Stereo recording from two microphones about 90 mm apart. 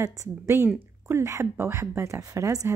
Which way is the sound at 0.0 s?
30° right (ahead or behind).